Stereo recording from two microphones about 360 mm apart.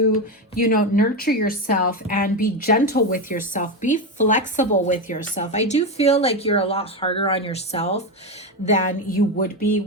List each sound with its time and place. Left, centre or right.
0.5 s a woman's voice: left